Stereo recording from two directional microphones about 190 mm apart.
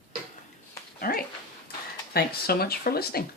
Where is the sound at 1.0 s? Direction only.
50° left (ahead or behind).